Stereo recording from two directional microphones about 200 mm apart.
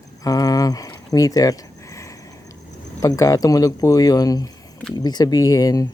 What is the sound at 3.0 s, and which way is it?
Speech, 15° left (ahead or behind).